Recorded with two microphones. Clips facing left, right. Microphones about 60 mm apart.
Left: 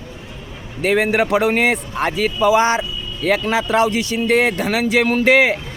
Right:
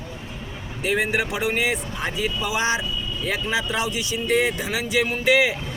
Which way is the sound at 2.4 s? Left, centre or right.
Left.